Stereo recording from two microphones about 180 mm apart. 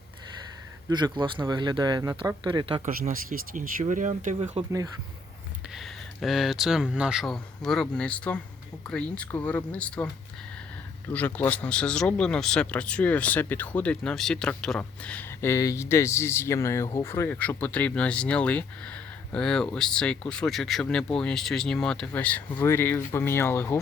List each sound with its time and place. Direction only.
0.9 s speech: 25° right (ahead or behind)
2.8 s speech: 50° right (ahead or behind)
4.6 s speech: 35° right (ahead or behind)
5.7 s speech: centre (ahead or behind)
11.1 s speech: 10° left (ahead or behind)